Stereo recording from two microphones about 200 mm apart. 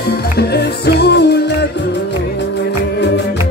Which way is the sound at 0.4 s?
55° left (ahead or behind).